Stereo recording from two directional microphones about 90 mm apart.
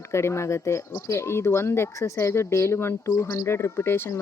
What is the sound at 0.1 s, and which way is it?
Speech, 30° left (ahead or behind).